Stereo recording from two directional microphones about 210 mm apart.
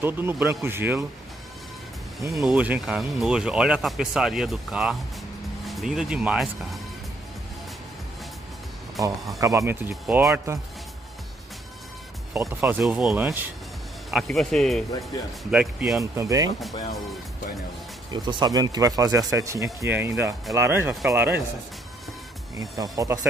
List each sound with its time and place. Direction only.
0.0 s speech: 10° right (ahead or behind)
2.4 s speech: 5° right (ahead or behind)
9.0 s speech: 15° right (ahead or behind)
12.4 s speech: 10° right (ahead or behind)
16.0 s speech: 15° right (ahead or behind)
18.1 s speech: 20° right (ahead or behind)
22.6 s speech: 15° right (ahead or behind)